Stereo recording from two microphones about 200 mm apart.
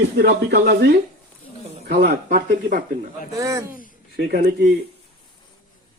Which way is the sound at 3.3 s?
15° right (ahead or behind).